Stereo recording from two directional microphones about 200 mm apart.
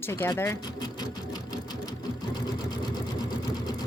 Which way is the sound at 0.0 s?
10° left (ahead or behind).